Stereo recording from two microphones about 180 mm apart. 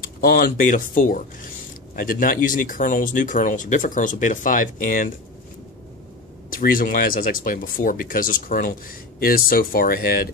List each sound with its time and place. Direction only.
0.2 s speech: 55° left (ahead or behind)
6.5 s speech: 50° left (ahead or behind)